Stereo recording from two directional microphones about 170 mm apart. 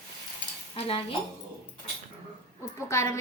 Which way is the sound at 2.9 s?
20° left (ahead or behind).